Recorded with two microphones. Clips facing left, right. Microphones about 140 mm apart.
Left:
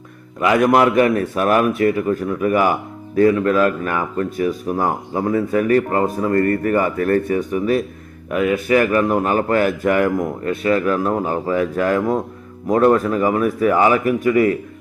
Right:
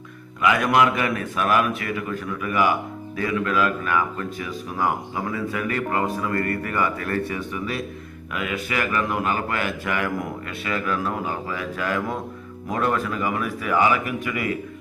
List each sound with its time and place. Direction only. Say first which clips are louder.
0.4 s speech: left 5 dB; 30° left (ahead or behind)